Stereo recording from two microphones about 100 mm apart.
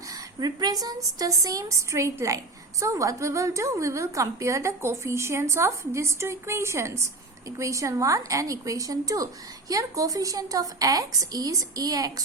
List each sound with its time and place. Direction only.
0.3 s a woman's voice: 40° right (ahead or behind)